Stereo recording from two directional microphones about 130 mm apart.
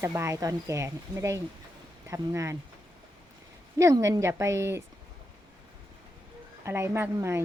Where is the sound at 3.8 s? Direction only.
25° right (ahead or behind).